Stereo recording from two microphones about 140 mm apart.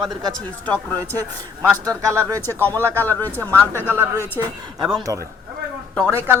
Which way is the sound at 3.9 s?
15° right (ahead or behind).